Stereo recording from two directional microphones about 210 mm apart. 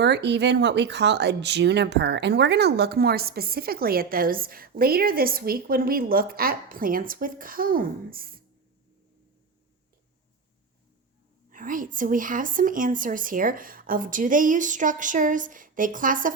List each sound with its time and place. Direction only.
0.0 s speech: 55° right (ahead or behind)
11.4 s a woman's voice: 40° right (ahead or behind)